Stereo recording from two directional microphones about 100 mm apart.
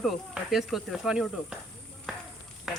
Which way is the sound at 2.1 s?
5° right (ahead or behind).